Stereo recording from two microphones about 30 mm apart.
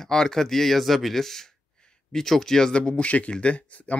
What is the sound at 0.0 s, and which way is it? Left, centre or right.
Speech, centre.